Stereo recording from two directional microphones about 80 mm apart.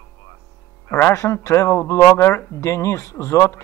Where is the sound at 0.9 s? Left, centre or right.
Left.